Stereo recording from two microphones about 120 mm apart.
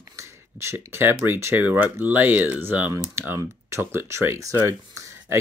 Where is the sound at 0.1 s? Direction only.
25° right (ahead or behind).